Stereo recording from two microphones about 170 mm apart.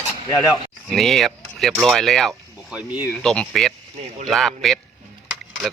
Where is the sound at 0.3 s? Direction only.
20° left (ahead or behind).